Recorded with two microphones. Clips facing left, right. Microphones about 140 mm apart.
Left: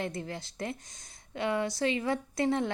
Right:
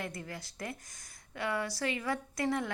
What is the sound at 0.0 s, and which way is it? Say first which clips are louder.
A woman's voice: left 5 dB; 25° left (ahead or behind).